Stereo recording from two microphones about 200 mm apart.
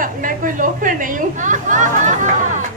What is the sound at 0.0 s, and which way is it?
Chatter, 40° right (ahead or behind).